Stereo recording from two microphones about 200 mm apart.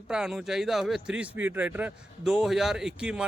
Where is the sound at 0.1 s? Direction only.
5° right (ahead or behind).